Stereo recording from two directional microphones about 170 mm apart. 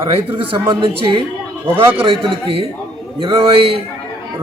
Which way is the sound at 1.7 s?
10° right (ahead or behind).